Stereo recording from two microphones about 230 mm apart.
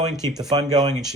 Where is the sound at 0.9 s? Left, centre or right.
Centre.